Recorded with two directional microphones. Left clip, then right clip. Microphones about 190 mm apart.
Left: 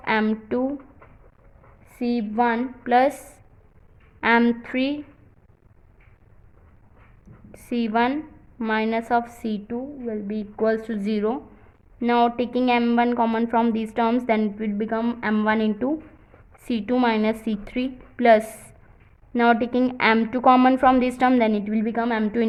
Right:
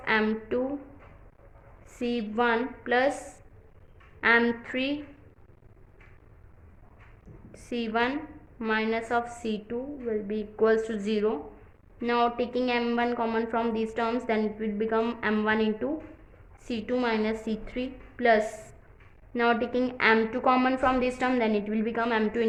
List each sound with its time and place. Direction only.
0.0 s a woman's voice: 35° left (ahead or behind)
1.9 s a woman's voice: 25° left (ahead or behind)
7.5 s a woman's voice: 40° left (ahead or behind)